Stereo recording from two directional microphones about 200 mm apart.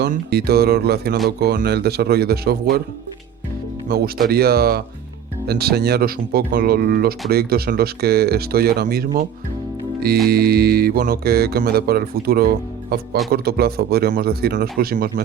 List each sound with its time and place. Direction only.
0.0 s speech: 55° right (ahead or behind)
3.8 s speech: 50° right (ahead or behind)
10.2 s speech: 50° right (ahead or behind)